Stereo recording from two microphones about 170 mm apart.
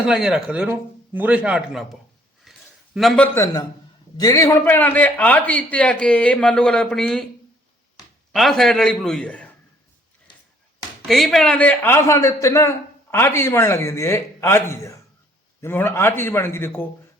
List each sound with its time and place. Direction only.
0.0 s a man's voice: 5° right (ahead or behind)
2.4 s a sound: centre (ahead or behind)
3.3 s a man's voice: 20° left (ahead or behind); by 7.3 s 5° left (ahead or behind)
8.3 s a man's voice: centre (ahead or behind)
11.1 s a man's voice: centre (ahead or behind)